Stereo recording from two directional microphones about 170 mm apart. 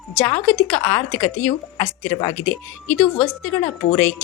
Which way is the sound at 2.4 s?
5° left (ahead or behind).